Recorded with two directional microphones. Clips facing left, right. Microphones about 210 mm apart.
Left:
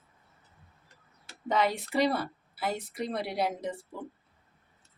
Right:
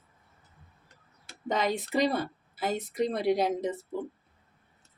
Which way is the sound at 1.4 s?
20° right (ahead or behind).